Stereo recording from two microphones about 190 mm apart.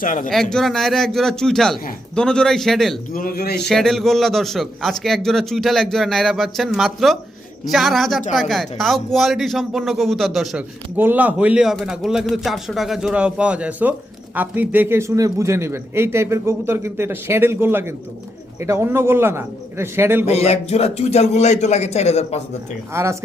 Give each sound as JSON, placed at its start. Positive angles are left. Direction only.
{"t": 0.0, "sound": "a man's voice", "side_deg": 45}
{"t": 0.5, "sound": "speech", "side_deg": 0}
{"t": 3.1, "sound": "a man's voice", "side_deg": 50}
{"t": 3.7, "sound": "a man's voice", "side_deg": 0}
{"t": 20.2, "sound": "a man's voice", "side_deg": 35}
{"t": 22.9, "sound": "a man's voice", "side_deg": -15}